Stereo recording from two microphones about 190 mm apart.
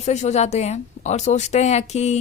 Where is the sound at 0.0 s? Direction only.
35° left (ahead or behind).